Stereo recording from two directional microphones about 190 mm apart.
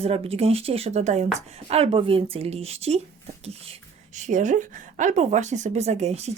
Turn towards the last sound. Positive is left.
turn(degrees=-35)  # may be behind; listen again after turning